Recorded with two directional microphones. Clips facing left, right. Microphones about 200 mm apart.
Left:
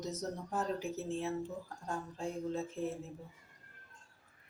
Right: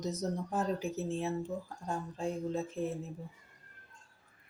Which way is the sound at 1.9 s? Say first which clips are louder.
Right 4 dB; 15° right (ahead or behind).